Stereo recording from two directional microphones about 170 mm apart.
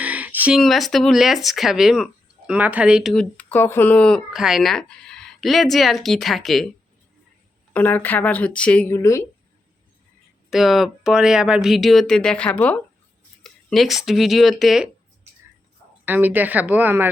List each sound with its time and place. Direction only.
0.0 s speech: 10° right (ahead or behind)
7.7 s speech: 10° left (ahead or behind)
10.5 s speech: centre (ahead or behind)
16.0 s speech: 10° right (ahead or behind)